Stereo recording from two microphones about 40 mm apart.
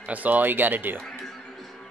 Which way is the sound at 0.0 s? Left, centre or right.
Right.